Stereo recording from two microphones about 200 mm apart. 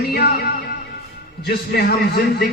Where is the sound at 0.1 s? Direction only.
55° left (ahead or behind).